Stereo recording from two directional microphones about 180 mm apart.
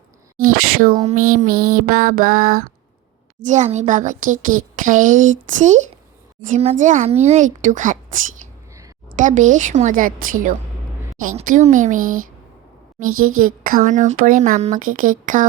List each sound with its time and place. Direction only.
0.4 s speech: 50° right (ahead or behind)
1.0 s a sound: 50° right (ahead or behind)
3.4 s speech: 40° right (ahead or behind)
9.1 s speech: 45° right (ahead or behind)